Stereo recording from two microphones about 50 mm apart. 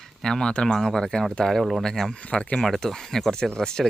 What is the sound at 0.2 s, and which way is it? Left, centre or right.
Speech, centre.